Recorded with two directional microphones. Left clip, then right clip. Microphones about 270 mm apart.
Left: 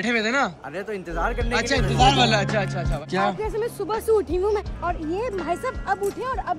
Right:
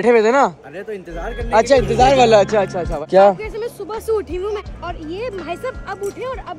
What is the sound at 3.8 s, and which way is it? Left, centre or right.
Speech, left.